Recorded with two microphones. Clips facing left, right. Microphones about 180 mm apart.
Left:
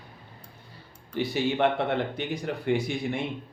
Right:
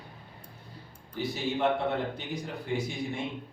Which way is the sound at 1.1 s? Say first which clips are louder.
Left 5 dB; 75° left (ahead or behind).